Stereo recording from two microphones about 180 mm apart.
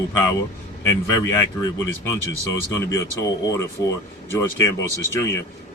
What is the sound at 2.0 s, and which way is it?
Speech, 15° left (ahead or behind).